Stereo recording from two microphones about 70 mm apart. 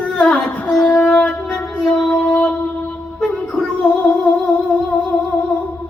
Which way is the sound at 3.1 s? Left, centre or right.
Centre.